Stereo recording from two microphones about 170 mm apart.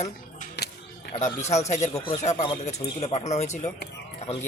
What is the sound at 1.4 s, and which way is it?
Speech, 40° left (ahead or behind).